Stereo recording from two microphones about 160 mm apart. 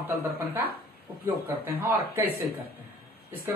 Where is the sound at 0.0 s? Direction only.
10° right (ahead or behind).